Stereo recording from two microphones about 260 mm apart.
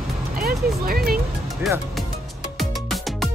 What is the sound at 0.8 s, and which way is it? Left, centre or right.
Music, right.